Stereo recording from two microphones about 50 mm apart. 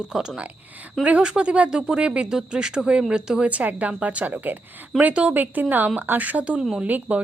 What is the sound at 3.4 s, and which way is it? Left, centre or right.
Speech, right.